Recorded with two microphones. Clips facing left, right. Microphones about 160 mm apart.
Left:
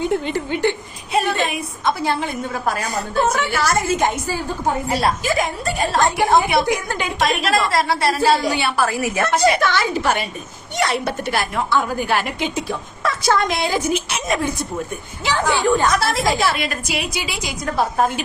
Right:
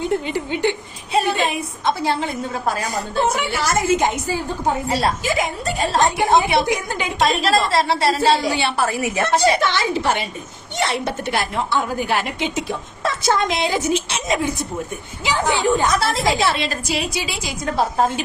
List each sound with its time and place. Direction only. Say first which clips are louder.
0.0 s speech: left 1 dB; centre (ahead or behind)
0.3 s speech: left 1 dB; 15° right (ahead or behind)
1.3 s a woman's voice: right 1 dB; 30° right (ahead or behind)
4.9 s a woman's voice: left 2 dB; 30° right (ahead or behind)
5.3 s a woman's voice: left 1 dB; 20° right (ahead or behind)